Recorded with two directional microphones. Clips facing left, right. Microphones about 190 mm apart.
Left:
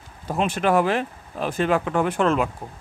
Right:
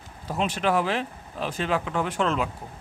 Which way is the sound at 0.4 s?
50° left (ahead or behind).